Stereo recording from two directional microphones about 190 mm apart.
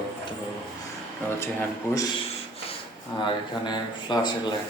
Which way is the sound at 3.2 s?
25° left (ahead or behind).